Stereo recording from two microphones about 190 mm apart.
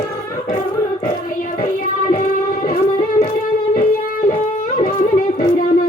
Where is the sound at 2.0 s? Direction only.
45° left (ahead or behind).